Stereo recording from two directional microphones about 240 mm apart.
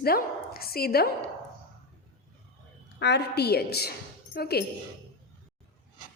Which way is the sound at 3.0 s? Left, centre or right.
Left.